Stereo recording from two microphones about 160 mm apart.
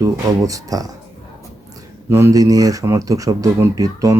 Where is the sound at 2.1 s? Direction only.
20° right (ahead or behind).